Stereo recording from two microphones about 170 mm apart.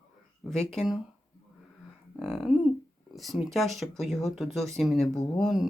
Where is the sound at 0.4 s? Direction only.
Centre (ahead or behind).